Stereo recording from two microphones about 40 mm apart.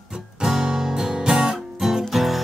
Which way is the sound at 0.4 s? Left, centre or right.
Centre.